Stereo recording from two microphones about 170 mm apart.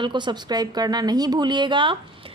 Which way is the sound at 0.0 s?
25° right (ahead or behind).